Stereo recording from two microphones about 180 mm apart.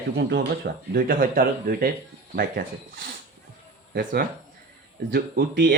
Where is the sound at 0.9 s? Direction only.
50° right (ahead or behind).